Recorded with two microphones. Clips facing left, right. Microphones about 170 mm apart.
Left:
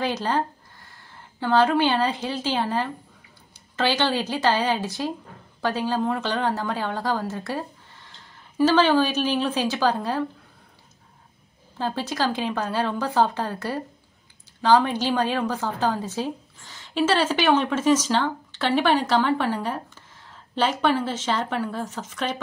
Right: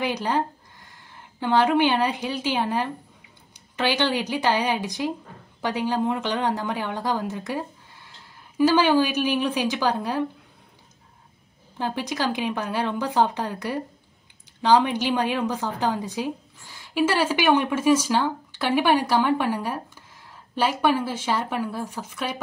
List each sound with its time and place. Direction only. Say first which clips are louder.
0.0 s a woman's voice: even; 15° right (ahead or behind)
11.8 s a woman's voice: left 1 dB; 15° right (ahead or behind)